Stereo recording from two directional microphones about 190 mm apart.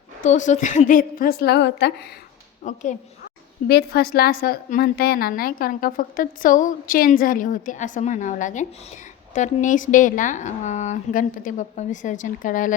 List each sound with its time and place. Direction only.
0.2 s a woman's voice: 40° left (ahead or behind); by 1.9 s 60° left (ahead or behind)
2.6 s a woman's voice: 40° left (ahead or behind)
3.7 s a woman's voice: 55° left (ahead or behind)